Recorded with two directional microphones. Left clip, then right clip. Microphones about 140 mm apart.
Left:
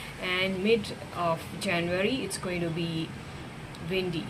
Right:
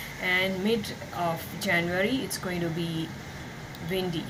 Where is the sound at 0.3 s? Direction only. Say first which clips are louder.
Even; 20° left (ahead or behind).